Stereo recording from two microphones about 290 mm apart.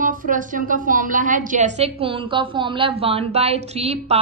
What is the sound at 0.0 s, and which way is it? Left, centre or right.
A woman's voice, right.